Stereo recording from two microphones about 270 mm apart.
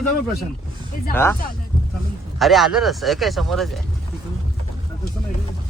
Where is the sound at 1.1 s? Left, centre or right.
Centre.